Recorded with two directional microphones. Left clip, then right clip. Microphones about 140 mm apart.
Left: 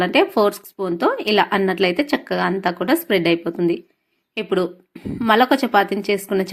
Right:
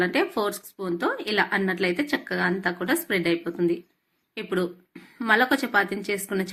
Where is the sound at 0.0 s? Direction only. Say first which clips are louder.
Left 8 dB; 45° left (ahead or behind).